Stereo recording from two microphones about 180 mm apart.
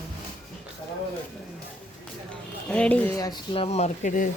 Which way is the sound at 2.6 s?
5° left (ahead or behind).